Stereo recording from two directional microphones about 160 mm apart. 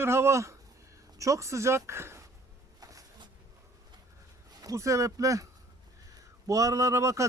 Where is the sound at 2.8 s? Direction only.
20° right (ahead or behind).